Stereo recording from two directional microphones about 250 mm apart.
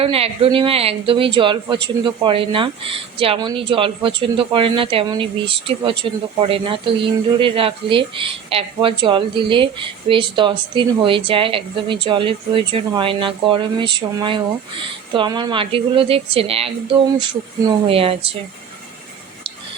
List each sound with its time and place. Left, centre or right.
0.0 s speech: right
17.8 s speech: right